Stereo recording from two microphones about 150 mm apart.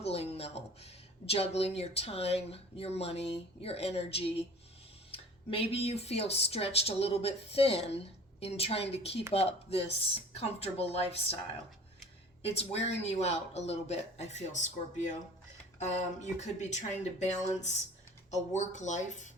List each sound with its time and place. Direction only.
0.0 s speech: 45° left (ahead or behind)
12.4 s speech: 45° left (ahead or behind)